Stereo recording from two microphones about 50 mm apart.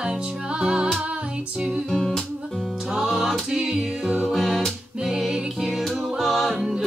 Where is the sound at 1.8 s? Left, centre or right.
Centre.